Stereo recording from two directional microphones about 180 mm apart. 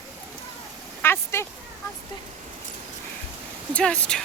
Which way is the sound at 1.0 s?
10° left (ahead or behind).